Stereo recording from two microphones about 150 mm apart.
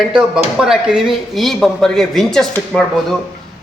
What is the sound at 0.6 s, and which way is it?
A man's voice, 5° right (ahead or behind).